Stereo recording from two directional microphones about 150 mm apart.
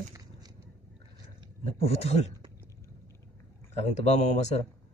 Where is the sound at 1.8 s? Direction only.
45° left (ahead or behind).